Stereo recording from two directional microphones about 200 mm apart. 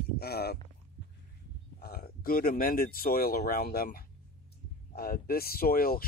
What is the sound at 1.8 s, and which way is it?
Speech, 50° left (ahead or behind).